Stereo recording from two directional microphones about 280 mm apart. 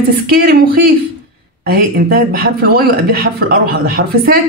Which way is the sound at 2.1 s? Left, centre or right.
Right.